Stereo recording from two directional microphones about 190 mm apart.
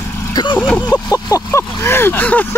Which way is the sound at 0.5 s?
10° left (ahead or behind).